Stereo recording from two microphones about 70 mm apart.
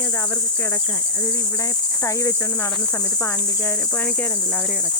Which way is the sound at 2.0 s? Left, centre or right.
Left.